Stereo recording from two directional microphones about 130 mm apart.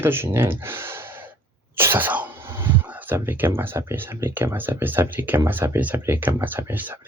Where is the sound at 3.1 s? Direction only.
15° right (ahead or behind).